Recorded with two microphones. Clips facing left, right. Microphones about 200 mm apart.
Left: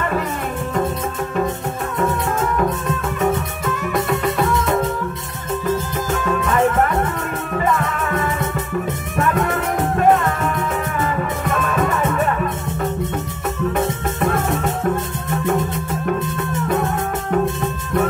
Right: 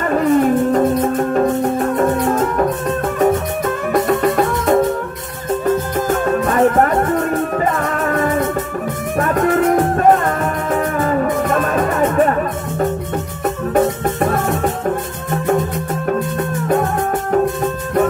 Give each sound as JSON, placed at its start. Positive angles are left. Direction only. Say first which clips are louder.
{"t": 0.0, "sound": "music", "louder": "right 9 dB", "side_deg": -45}
{"t": 3.2, "sound": "music", "louder": "right 6 dB", "side_deg": -45}
{"t": 6.0, "sound": "music", "louder": "right 4 dB", "side_deg": -50}